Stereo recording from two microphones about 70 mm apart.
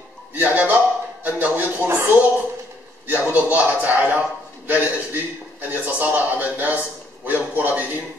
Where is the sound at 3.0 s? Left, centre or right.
Right.